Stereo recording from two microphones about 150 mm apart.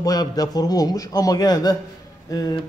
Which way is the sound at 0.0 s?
25° left (ahead or behind).